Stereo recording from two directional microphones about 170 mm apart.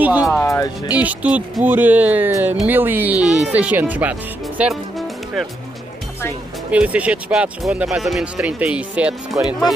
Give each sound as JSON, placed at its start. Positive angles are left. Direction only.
{"t": 0.0, "sound": "speech", "side_deg": -10}
{"t": 0.3, "sound": "speech", "side_deg": 15}
{"t": 0.9, "sound": "speech", "side_deg": -10}
{"t": 6.7, "sound": "speech", "side_deg": -10}